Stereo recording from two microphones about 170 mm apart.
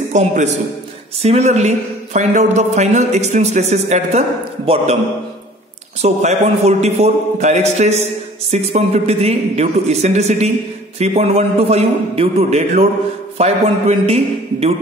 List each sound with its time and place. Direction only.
0.1 s a man's voice: 45° right (ahead or behind)
6.0 s a man's voice: 40° right (ahead or behind)